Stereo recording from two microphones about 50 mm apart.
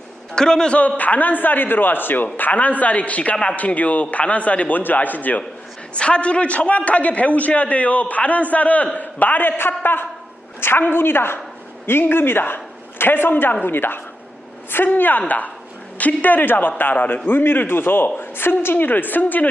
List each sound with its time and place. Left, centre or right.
0.3 s a man's voice: centre
0.8 s a man's voice: left
5.9 s a man's voice: left